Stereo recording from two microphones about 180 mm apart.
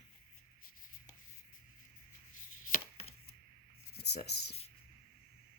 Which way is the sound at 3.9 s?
65° left (ahead or behind).